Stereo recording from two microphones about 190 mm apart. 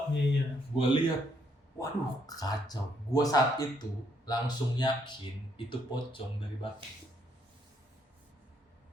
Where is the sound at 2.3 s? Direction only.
20° left (ahead or behind).